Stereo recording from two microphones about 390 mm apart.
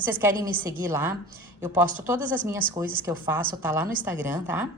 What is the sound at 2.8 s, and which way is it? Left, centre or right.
A woman's voice, centre.